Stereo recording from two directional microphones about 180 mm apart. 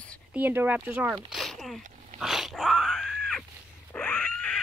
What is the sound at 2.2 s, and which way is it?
Dog, centre (ahead or behind).